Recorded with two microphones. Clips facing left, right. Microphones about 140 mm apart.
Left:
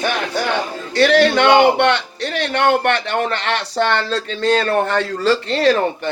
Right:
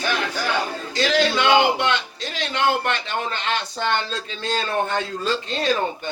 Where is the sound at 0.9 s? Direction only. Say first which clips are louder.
Left 7 dB; 65° left (ahead or behind).